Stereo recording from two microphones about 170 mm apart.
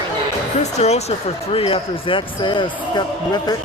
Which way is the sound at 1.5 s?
35° left (ahead or behind).